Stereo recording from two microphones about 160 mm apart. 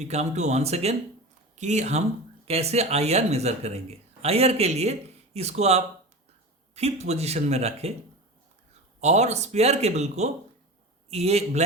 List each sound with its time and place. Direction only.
0.1 s speech: 45° right (ahead or behind)
9.0 s speech: 45° right (ahead or behind)